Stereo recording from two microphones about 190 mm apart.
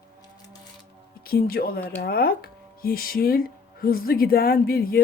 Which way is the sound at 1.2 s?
50° left (ahead or behind).